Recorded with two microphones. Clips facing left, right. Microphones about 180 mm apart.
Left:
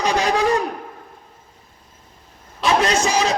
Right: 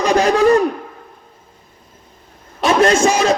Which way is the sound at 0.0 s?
45° right (ahead or behind).